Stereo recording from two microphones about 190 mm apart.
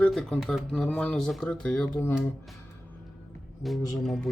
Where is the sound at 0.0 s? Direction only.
5° left (ahead or behind).